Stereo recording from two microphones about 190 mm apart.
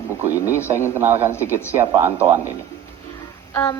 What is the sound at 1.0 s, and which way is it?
Speech, 10° right (ahead or behind).